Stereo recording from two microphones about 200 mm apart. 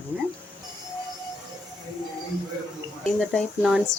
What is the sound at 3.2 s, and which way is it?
Speech, 5° left (ahead or behind).